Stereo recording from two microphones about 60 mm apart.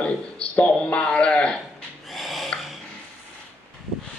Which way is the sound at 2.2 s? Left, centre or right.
Centre.